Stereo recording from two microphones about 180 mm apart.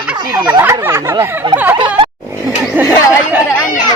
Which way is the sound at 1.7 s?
30° right (ahead or behind).